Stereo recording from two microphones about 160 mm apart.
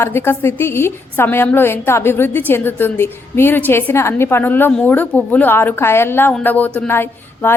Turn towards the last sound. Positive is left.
turn(degrees=15)  # may be behind; listen again after turning